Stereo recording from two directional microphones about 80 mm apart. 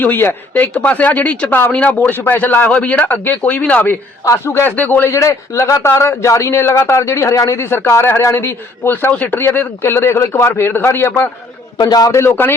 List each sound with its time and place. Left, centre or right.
0.0 s speech: left
4.3 s speech: left
5.1 s speech: left
7.6 s speech: left
11.8 s a man's voice: left
12.1 s speech: left